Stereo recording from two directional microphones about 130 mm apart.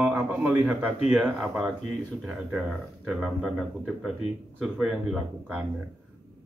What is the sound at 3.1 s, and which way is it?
Speech, 5° right (ahead or behind).